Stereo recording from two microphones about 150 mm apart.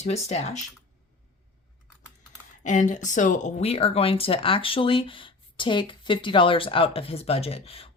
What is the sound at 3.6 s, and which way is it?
Speech, 40° left (ahead or behind).